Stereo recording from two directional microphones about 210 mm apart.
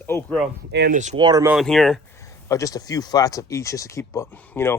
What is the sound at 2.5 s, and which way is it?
Speech, 15° left (ahead or behind).